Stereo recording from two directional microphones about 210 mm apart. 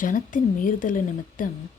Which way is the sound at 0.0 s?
40° left (ahead or behind).